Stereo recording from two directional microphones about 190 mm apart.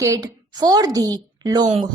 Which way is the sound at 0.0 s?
15° right (ahead or behind).